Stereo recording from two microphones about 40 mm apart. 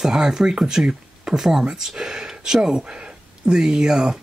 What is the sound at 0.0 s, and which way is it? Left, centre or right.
Speech, centre.